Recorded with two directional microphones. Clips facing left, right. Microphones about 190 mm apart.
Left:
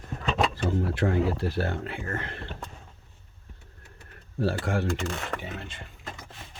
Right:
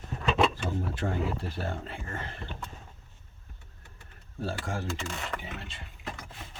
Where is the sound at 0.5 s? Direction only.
75° left (ahead or behind).